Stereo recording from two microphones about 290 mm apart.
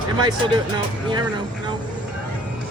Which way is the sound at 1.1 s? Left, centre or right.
Centre.